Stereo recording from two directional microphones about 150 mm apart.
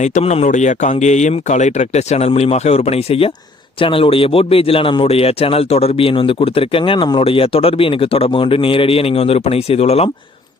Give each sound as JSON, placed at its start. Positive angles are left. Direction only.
{"t": 0.0, "sound": "a man's voice", "side_deg": 50}